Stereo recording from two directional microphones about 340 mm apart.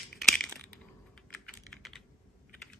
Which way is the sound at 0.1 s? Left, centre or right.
Centre.